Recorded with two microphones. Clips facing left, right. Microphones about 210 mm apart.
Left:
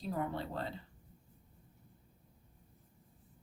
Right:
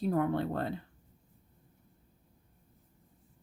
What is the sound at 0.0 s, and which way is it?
Speech, 60° right (ahead or behind).